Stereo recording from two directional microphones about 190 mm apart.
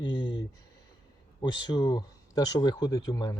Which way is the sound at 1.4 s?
20° left (ahead or behind).